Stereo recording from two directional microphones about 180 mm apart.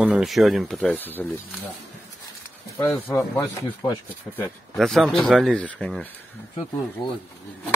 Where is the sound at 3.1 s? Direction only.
10° left (ahead or behind).